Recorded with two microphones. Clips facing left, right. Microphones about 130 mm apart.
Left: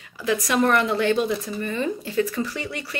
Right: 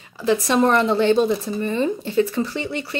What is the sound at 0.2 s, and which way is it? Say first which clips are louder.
Speech: right 4 dB; 30° right (ahead or behind).